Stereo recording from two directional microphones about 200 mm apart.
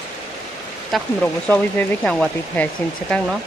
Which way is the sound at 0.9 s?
Centre (ahead or behind).